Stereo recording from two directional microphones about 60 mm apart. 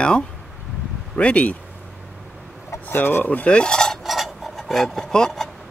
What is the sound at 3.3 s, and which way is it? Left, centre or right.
Cutlery, left.